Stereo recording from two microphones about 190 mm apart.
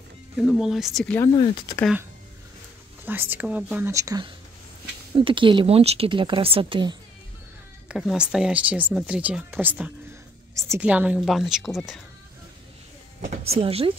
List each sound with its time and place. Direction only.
0.4 s a woman's voice: centre (ahead or behind)
1.3 s speech: 25° left (ahead or behind)
3.1 s speech: 10° right (ahead or behind); by 7.0 s 25° right (ahead or behind)
7.9 s a woman's voice: 5° right (ahead or behind)
13.3 s speech: 30° right (ahead or behind)